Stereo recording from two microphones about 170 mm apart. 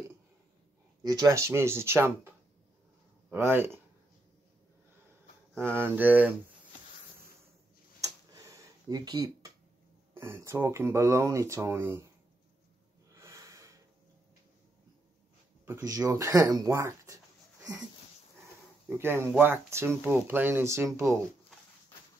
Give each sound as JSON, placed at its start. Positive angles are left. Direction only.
{"t": 1.0, "sound": "speech", "side_deg": -20}
{"t": 5.6, "sound": "speech", "side_deg": -15}
{"t": 8.0, "sound": "tick-tock", "side_deg": -20}
{"t": 10.1, "sound": "speech", "side_deg": -15}
{"t": 13.1, "sound": "a sound", "side_deg": -15}
{"t": 15.6, "sound": "speech", "side_deg": -20}
{"t": 18.9, "sound": "speech", "side_deg": -15}